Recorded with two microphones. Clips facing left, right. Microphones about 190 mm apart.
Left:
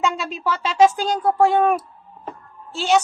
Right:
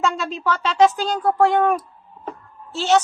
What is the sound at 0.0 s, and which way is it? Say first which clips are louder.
A woman's voice: even; centre (ahead or behind).